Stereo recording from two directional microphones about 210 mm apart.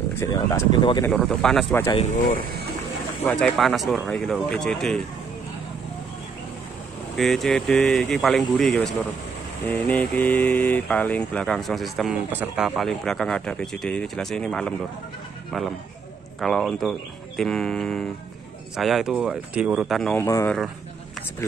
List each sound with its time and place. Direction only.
0.2 s speech: 15° left (ahead or behind)
1.1 s speech: centre (ahead or behind)
3.3 s speech: 5° left (ahead or behind)
7.2 s speech: centre (ahead or behind)
20.2 s speech: 15° left (ahead or behind)